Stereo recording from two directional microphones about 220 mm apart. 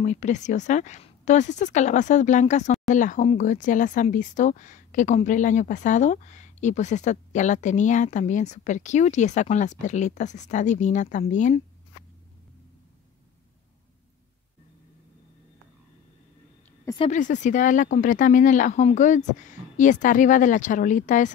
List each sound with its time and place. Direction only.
0.0 s speech: 35° left (ahead or behind)
17.0 s speech: 35° left (ahead or behind)